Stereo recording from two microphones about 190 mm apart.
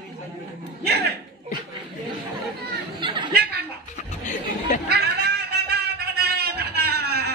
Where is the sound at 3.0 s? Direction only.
25° right (ahead or behind).